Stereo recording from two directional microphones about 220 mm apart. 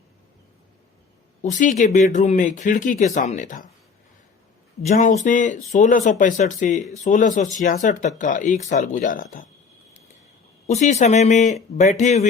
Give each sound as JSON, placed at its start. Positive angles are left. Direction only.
{"t": 1.4, "sound": "speech", "side_deg": 35}
{"t": 4.9, "sound": "speech", "side_deg": 35}
{"t": 10.7, "sound": "speech", "side_deg": 30}